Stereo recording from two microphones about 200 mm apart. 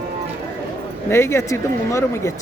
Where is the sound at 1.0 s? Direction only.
15° left (ahead or behind).